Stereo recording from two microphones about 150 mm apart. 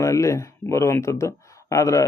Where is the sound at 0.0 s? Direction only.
20° left (ahead or behind).